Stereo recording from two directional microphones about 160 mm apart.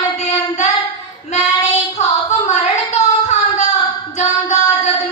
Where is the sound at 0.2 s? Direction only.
45° left (ahead or behind).